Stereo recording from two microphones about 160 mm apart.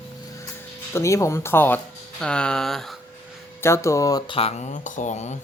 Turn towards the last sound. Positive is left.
turn(degrees=45)  # may be behind; listen again after turning